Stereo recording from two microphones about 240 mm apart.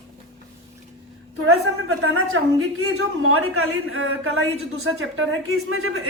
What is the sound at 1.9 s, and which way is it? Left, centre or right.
A man's voice, right.